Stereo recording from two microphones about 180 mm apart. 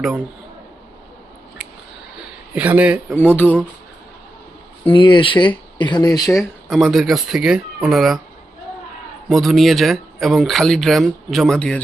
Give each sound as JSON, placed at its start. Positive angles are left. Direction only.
{"t": 2.6, "sound": "a man's voice", "side_deg": -10}
{"t": 3.2, "sound": "speech", "side_deg": 10}
{"t": 4.9, "sound": "speech", "side_deg": 25}
{"t": 6.7, "sound": "speech", "side_deg": 0}
{"t": 9.3, "sound": "speech", "side_deg": 0}